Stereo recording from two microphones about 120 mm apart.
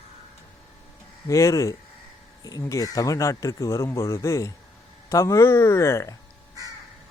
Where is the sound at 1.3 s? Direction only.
25° left (ahead or behind).